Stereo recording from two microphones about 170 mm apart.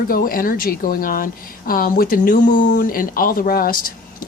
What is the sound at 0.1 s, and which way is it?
Speech, 55° left (ahead or behind).